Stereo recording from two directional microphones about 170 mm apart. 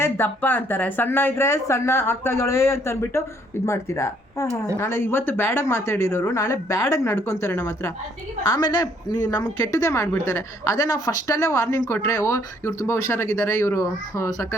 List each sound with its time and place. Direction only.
0.0 s a woman's voice: 10° left (ahead or behind)